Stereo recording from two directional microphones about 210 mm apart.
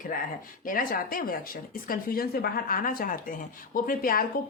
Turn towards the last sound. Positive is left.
turn(degrees=45)  # may be behind; listen again after turning